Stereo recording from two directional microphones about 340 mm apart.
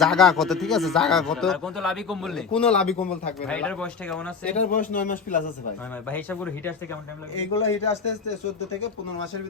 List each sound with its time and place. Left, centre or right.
0.0 s speech: centre
4.5 s a man's voice: left
6.1 s speech: centre
7.5 s a man's voice: centre